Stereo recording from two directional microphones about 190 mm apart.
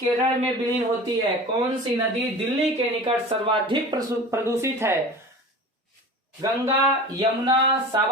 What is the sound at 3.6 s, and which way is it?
Speech, 20° right (ahead or behind).